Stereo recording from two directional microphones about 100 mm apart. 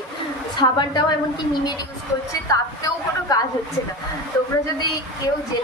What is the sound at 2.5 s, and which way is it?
Speech, 35° left (ahead or behind).